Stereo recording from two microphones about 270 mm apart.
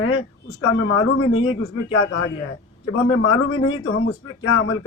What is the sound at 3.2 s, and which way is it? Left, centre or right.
Speech, left.